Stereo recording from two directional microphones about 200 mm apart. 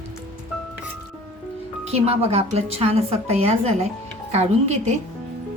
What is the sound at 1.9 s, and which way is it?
A woman's voice, 30° right (ahead or behind).